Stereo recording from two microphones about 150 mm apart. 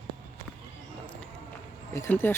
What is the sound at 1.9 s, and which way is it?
Speech, 15° left (ahead or behind).